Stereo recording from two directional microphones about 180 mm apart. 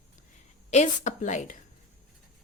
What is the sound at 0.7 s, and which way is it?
Speech, 40° left (ahead or behind).